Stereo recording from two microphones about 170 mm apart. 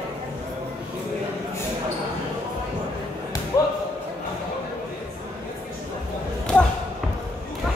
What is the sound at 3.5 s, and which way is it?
Slam, 15° left (ahead or behind).